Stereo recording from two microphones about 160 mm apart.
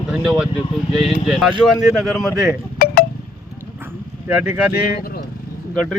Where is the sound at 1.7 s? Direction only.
Centre (ahead or behind).